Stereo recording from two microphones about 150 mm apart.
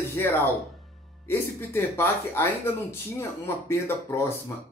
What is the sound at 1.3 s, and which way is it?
Speech, 15° left (ahead or behind).